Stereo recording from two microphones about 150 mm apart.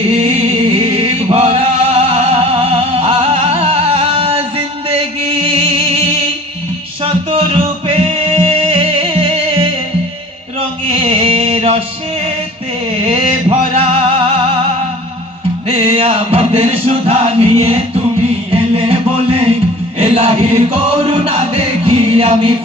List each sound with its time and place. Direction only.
0.1 s chant: 40° right (ahead or behind)
7.0 s music: 40° right (ahead or behind)
10.8 s music: 40° right (ahead or behind)
13.1 s music: 40° right (ahead or behind)
15.6 s music: 40° right (ahead or behind)
20.0 s chant: 40° right (ahead or behind)
20.7 s music: 35° right (ahead or behind)